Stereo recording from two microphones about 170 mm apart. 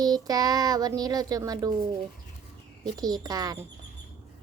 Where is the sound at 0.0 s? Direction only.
25° right (ahead or behind).